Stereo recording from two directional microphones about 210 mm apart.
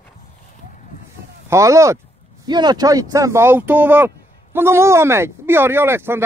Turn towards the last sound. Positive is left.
turn(degrees=-10)  # may be behind; listen again after turning